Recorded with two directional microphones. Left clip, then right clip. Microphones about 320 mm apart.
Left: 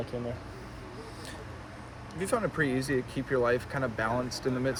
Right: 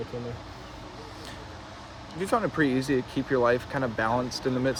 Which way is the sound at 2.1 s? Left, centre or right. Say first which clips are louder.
Right 4 dB; right.